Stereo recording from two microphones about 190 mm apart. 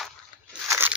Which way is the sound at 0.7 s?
10° right (ahead or behind).